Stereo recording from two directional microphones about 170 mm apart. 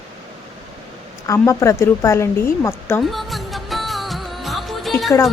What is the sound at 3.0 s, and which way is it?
Music of bollywood, centre (ahead or behind).